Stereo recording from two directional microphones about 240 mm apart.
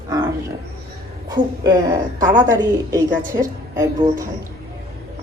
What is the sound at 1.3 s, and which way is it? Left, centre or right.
A woman's voice, centre.